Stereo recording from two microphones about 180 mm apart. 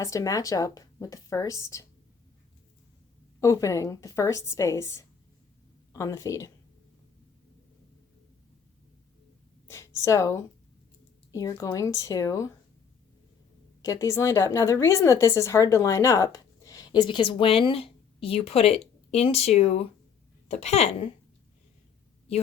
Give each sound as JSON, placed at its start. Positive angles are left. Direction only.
{"t": 0.0, "sound": "a woman's voice", "side_deg": 20}
{"t": 3.4, "sound": "a woman's voice", "side_deg": 15}
{"t": 9.6, "sound": "a woman's voice", "side_deg": 15}
{"t": 13.8, "sound": "a woman's voice", "side_deg": 20}